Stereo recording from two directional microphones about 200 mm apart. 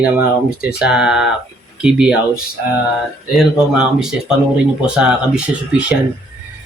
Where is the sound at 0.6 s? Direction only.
5° right (ahead or behind).